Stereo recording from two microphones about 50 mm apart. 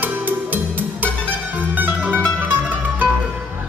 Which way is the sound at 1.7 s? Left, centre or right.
Right.